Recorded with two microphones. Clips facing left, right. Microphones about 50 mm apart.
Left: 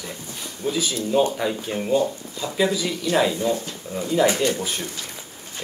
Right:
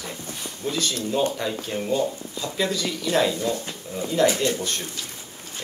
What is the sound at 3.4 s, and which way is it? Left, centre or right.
Speech, centre.